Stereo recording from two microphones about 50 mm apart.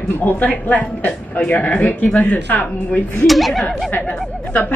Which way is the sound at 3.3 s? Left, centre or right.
Centre.